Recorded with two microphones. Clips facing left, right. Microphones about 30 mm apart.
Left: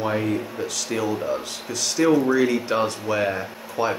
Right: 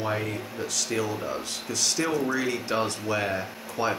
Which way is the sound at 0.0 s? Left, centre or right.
Centre.